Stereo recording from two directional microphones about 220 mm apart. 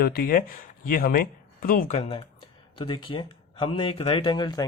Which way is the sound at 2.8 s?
20° left (ahead or behind).